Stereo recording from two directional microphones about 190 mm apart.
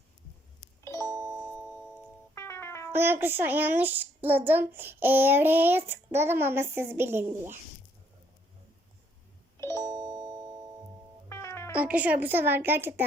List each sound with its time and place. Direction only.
1.0 s doorbell: 20° right (ahead or behind)
2.3 s music: 15° left (ahead or behind)
2.9 s a child's voice: 10° right (ahead or behind)
9.6 s doorbell: 15° left (ahead or behind)
9.8 s music: 20° right (ahead or behind)
11.3 s music: 15° left (ahead or behind)
11.7 s a child's voice: 5° right (ahead or behind)